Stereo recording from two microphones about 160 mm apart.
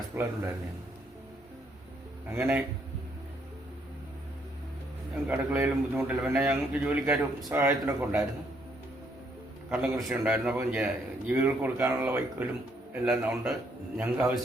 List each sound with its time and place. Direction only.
0.1 s a man's voice: 15° right (ahead or behind)
2.3 s a man's voice: 5° right (ahead or behind)
5.3 s a man's voice: 10° right (ahead or behind)
9.6 s a man's voice: 5° right (ahead or behind)